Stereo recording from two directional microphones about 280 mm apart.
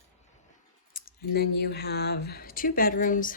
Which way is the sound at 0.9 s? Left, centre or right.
Left.